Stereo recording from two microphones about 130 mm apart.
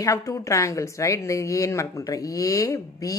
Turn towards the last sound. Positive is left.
turn(degrees=25)  # may be behind; listen again after turning